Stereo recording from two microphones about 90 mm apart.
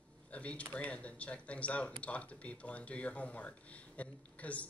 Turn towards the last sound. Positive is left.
turn(degrees=15)  # may be behind; listen again after turning